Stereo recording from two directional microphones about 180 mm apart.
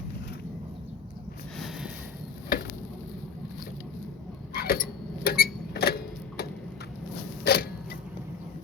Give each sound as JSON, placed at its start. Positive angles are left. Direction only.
{"t": 1.5, "sound": "snort", "side_deg": 0}
{"t": 4.5, "sound": "a sound", "side_deg": 60}
{"t": 7.4, "sound": "creak", "side_deg": 65}